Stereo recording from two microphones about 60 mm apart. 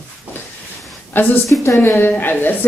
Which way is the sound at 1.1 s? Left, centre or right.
Left.